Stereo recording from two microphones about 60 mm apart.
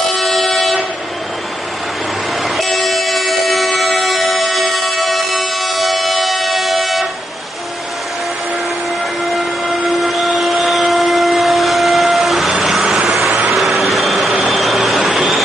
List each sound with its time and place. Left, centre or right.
0.1 s train: centre
2.4 s train: centre
9.2 s a sound: centre
12.9 s vehicle: centre
13.5 s a sound: centre
14.4 s vehicle: centre